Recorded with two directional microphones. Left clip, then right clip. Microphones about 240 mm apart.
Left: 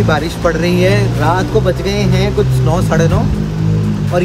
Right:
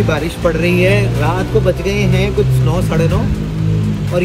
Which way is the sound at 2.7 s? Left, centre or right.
Centre.